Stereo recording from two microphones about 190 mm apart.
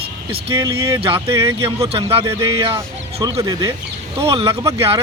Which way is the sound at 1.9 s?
30° right (ahead or behind).